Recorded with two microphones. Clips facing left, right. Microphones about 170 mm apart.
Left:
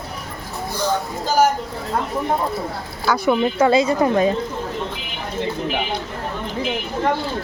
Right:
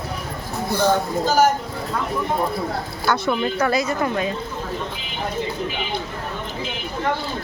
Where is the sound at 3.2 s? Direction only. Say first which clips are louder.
Left 4 dB; 20° left (ahead or behind).